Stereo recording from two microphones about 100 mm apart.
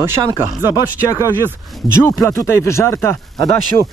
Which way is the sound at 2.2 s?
25° left (ahead or behind).